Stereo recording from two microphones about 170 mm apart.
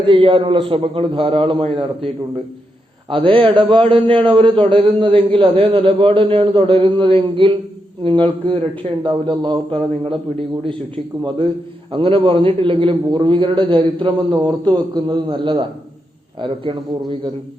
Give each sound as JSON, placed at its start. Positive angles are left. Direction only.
{"t": 0.0, "sound": "a man's voice", "side_deg": -30}
{"t": 3.1, "sound": "a man's voice", "side_deg": -30}